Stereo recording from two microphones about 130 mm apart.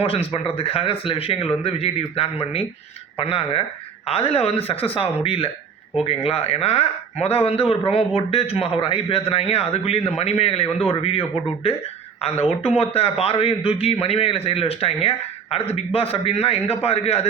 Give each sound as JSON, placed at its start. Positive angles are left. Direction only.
{"t": 0.0, "sound": "speech", "side_deg": 50}